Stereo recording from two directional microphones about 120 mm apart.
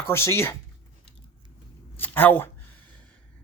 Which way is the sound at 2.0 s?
15° left (ahead or behind).